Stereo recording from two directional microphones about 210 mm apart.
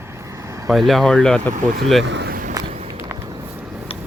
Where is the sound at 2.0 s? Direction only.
55° right (ahead or behind).